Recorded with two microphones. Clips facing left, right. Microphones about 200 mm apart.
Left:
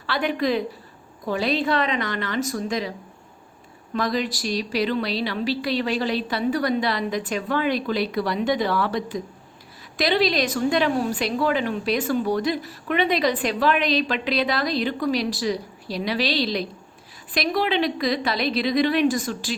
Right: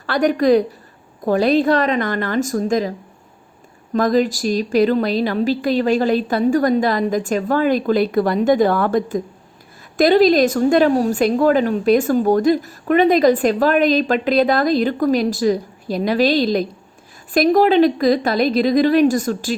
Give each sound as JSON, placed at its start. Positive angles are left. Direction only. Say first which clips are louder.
{"t": 0.0, "sound": "a woman's voice", "louder": "right 8 dB", "side_deg": -45}
{"t": 3.9, "sound": "a woman's voice", "louder": "right 8 dB", "side_deg": -45}